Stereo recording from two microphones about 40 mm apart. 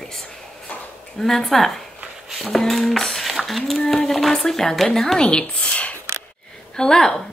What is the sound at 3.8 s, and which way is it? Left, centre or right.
Speech, centre.